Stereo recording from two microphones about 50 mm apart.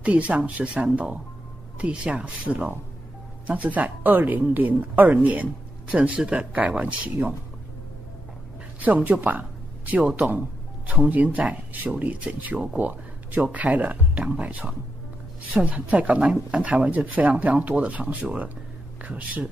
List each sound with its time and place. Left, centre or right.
0.0 s a woman's voice: right
8.7 s a woman's voice: right